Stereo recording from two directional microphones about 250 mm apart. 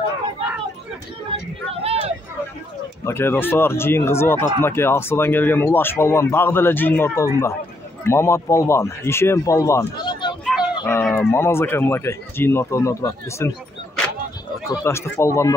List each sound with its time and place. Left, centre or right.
1.3 s vehicle: centre
1.7 s a sound: right
3.0 s speech: centre
10.4 s a sound: centre
10.9 s speech: centre
14.7 s speech: centre